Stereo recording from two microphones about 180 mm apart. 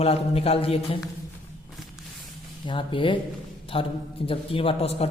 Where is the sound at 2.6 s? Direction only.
30° left (ahead or behind).